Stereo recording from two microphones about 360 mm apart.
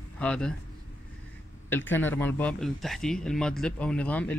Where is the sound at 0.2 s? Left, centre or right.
Centre.